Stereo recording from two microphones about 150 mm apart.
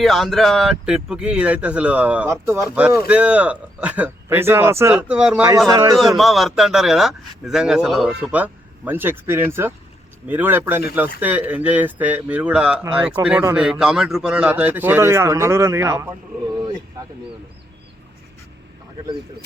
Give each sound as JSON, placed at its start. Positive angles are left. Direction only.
{"t": 0.0, "sound": "speech", "side_deg": 0}
{"t": 5.6, "sound": "a man's voice", "side_deg": -25}
{"t": 6.0, "sound": "a man's voice", "side_deg": 0}
{"t": 13.2, "sound": "a man's voice", "side_deg": -20}
{"t": 13.6, "sound": "speech", "side_deg": -5}